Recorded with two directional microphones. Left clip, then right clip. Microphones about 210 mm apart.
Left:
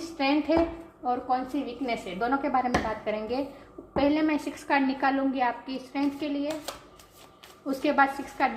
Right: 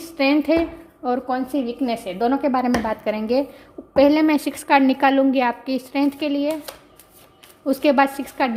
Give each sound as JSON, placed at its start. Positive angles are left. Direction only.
{"t": 0.2, "sound": "a woman's voice", "side_deg": -55}
{"t": 7.7, "sound": "a woman's voice", "side_deg": -50}